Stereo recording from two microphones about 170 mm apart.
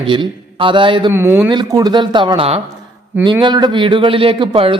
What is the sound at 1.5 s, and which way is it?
A man's voice, 25° right (ahead or behind).